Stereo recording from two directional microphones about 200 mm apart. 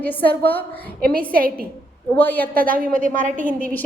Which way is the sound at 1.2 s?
45° right (ahead or behind).